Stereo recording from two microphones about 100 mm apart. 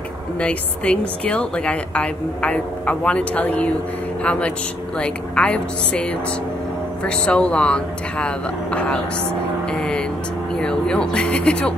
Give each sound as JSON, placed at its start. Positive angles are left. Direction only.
{"t": 0.4, "sound": "a woman's voice", "side_deg": 15}